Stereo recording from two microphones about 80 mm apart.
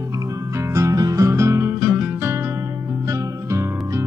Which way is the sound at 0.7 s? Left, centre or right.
Right.